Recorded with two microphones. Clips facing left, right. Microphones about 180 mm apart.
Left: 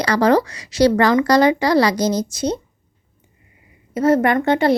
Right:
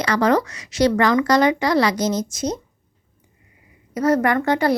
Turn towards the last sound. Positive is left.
turn(degrees=25)  # may be behind; listen again after turning